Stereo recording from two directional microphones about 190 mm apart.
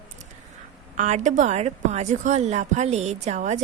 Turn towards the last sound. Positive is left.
turn(degrees=-40)  # may be behind; listen again after turning